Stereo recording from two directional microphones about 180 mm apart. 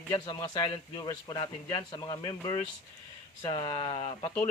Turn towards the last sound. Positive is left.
turn(degrees=30)  # may be behind; listen again after turning